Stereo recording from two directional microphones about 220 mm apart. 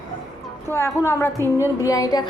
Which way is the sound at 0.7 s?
10° left (ahead or behind).